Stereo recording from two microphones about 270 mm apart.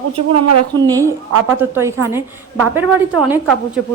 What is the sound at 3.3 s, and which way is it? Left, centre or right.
Speech, centre.